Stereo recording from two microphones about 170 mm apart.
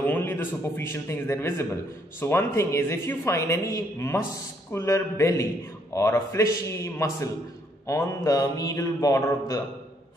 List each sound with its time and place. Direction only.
0.0 s a man's voice: 10° left (ahead or behind)
7.8 s mantra: 15° left (ahead or behind)